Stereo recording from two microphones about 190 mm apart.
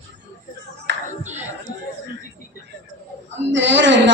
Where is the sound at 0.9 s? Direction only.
70° right (ahead or behind).